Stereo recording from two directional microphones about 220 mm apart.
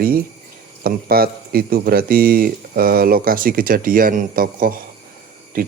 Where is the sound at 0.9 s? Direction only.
45° right (ahead or behind).